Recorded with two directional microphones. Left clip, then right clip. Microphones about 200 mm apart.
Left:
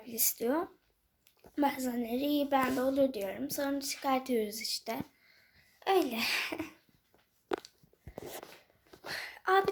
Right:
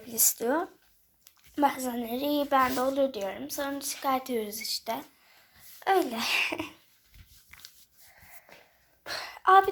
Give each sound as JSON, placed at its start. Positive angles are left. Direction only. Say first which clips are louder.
{"t": 0.0, "sound": "speech", "louder": "right 5 dB", "side_deg": 5}
{"t": 3.0, "sound": "a woman's voice", "louder": "right 2 dB", "side_deg": 20}
{"t": 9.1, "sound": "a sound", "louder": "right 8 dB", "side_deg": 5}